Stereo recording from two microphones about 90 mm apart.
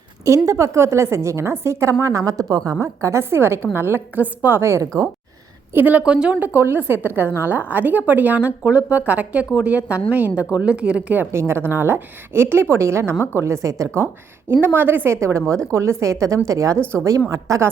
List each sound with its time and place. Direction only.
0.3 s a woman's voice: 35° right (ahead or behind)
5.7 s a woman's voice: 20° right (ahead or behind)
11.3 s a woman's voice: 30° right (ahead or behind)
14.5 s a woman's voice: 25° right (ahead or behind)